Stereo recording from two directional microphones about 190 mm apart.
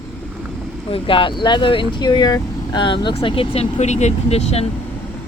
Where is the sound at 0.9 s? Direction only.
25° left (ahead or behind).